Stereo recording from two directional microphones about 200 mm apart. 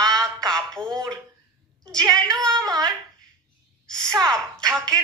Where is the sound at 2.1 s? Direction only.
5° left (ahead or behind).